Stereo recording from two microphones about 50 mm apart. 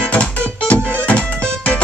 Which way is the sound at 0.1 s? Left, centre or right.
Left.